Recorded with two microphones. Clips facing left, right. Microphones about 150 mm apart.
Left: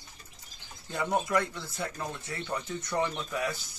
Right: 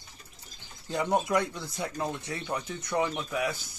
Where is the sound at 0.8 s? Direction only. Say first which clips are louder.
Right 3 dB; 20° right (ahead or behind).